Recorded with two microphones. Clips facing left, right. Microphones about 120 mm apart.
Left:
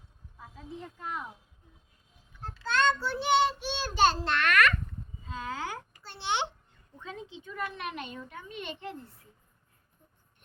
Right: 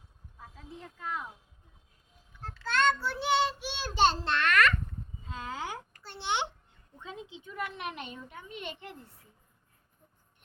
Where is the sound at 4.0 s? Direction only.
25° right (ahead or behind).